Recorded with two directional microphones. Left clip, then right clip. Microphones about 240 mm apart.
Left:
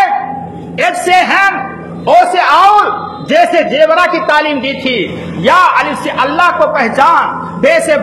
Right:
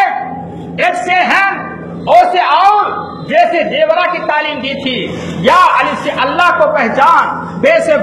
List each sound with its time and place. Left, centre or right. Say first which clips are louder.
0.7 s a sound: left 2 dB; left
2.0 s music: left 1 dB; left
3.3 s a man's voice: left 2 dB; left